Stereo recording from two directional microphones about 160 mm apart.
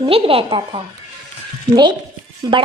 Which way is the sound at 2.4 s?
25° right (ahead or behind).